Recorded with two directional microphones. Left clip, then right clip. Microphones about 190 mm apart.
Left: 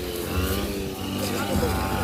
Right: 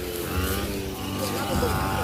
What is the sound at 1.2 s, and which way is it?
Vehicle, 50° left (ahead or behind).